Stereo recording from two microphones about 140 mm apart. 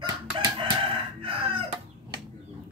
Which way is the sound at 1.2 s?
40° right (ahead or behind).